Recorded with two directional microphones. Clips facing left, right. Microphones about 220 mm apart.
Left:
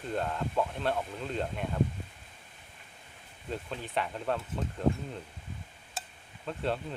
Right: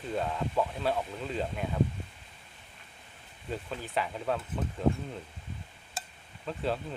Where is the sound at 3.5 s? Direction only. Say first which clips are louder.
Right 1 dB; centre (ahead or behind).